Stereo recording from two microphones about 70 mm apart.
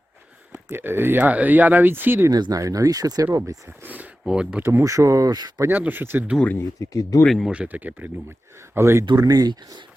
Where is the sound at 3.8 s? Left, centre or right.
Right.